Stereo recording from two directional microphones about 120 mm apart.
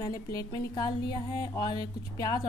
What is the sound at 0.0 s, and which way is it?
A woman's voice, 30° left (ahead or behind).